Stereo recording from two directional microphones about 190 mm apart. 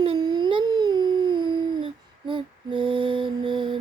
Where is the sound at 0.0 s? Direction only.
25° right (ahead or behind).